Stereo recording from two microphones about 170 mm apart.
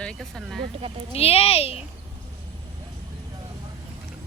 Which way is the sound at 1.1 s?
35° left (ahead or behind).